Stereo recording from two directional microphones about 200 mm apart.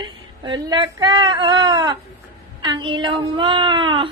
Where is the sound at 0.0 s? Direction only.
20° right (ahead or behind).